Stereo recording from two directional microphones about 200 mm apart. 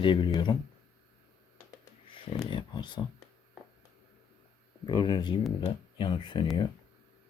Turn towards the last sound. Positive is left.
turn(degrees=25)  # may be behind; listen again after turning